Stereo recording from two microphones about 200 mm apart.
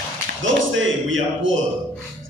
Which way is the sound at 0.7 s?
75° right (ahead or behind).